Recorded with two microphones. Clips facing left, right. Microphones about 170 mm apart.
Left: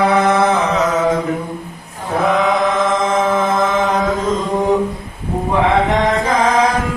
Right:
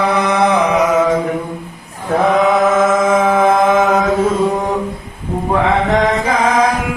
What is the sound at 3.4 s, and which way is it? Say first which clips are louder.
Mantra: right 5 dB; 55° right (ahead or behind).